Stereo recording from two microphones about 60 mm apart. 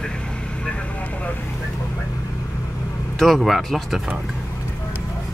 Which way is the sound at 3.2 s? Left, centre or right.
Centre.